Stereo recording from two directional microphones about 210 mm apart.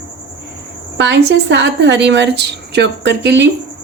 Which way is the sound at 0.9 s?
55° right (ahead or behind).